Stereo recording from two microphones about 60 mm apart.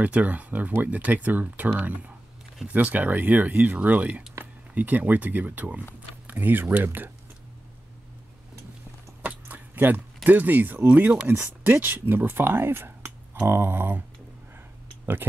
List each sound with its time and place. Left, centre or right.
0.0 s speech: right
9.2 s a sound: right
10.9 s speech: right
11.2 s speech: right